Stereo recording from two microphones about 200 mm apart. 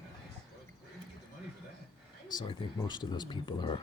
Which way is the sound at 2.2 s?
20° left (ahead or behind).